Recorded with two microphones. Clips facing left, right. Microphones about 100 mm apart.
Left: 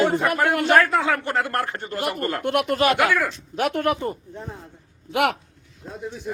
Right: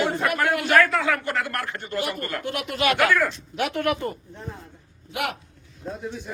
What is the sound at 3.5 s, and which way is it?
Speech, 45° left (ahead or behind).